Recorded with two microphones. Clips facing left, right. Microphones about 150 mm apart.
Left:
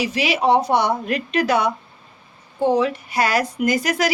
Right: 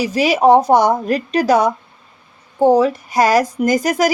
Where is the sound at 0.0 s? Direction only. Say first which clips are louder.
Right 6 dB; 40° right (ahead or behind).